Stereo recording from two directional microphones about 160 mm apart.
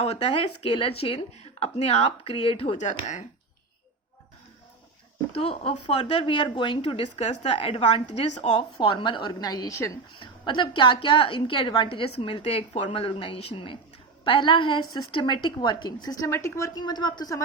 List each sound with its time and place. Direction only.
0.0 s speech: 40° left (ahead or behind)
2.7 s speech: 50° left (ahead or behind)
5.3 s a woman's voice: 40° left (ahead or behind); by 10.0 s 20° left (ahead or behind)
10.2 s a woman's voice: 30° left (ahead or behind)